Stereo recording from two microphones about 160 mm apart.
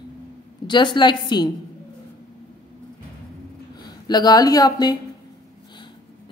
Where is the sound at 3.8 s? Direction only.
25° left (ahead or behind).